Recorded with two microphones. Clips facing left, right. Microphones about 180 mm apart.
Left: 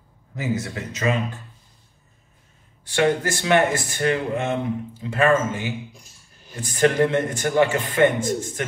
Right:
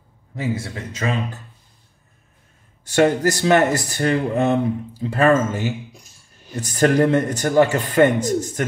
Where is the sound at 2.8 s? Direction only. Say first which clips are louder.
Right 4 dB; 40° right (ahead or behind).